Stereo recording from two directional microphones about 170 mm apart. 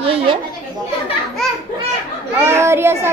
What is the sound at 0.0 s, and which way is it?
Chatter, 35° right (ahead or behind).